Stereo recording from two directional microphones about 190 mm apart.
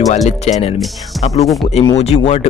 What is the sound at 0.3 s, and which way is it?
Speech, 35° left (ahead or behind).